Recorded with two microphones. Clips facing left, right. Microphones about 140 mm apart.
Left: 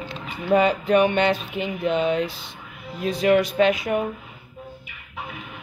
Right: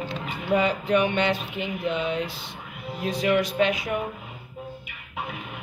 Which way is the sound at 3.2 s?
45° left (ahead or behind).